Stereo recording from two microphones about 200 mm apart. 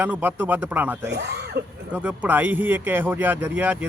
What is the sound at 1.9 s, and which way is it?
Speech, 5° right (ahead or behind).